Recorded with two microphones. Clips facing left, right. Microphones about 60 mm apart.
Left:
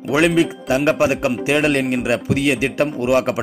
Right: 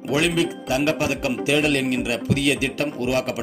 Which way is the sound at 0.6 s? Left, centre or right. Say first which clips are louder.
Left 5 dB; left.